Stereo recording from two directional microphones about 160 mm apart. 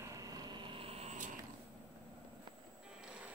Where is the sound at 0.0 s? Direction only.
20° right (ahead or behind); by 1.3 s 45° right (ahead or behind).